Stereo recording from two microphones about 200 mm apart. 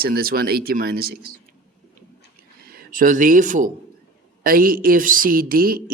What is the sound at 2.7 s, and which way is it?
Speech, 40° right (ahead or behind).